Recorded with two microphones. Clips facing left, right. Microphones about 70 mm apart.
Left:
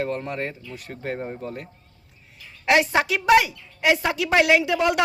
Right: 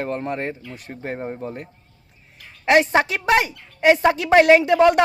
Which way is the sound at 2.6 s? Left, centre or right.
Right.